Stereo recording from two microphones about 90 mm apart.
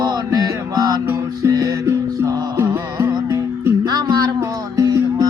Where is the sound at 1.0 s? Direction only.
30° right (ahead or behind).